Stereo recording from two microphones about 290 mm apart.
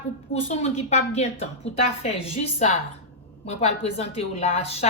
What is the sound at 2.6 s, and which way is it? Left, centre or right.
Speech, left.